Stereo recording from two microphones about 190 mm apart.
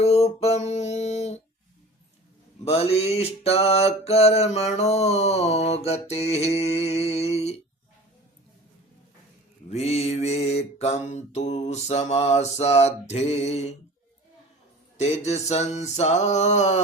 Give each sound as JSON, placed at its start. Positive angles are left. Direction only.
{"t": 0.0, "sound": "a sound", "side_deg": 35}
{"t": 2.6, "sound": "mantra", "side_deg": 30}
{"t": 9.6, "sound": "mantra", "side_deg": 35}
{"t": 14.9, "sound": "mantra", "side_deg": 35}